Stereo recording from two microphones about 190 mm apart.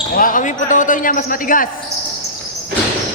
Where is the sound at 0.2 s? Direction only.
45° left (ahead or behind).